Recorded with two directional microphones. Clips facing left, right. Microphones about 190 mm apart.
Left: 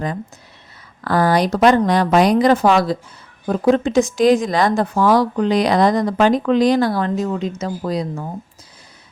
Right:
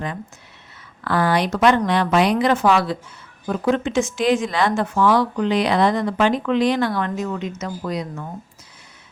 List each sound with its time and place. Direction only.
1.0 s speech: 40° left (ahead or behind)